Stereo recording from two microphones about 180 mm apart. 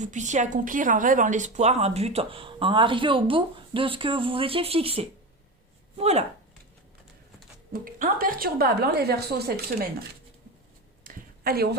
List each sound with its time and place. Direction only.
0.0 s a woman's voice: 40° right (ahead or behind)
7.7 s a woman's voice: 50° right (ahead or behind)
11.0 s a sound: 55° right (ahead or behind)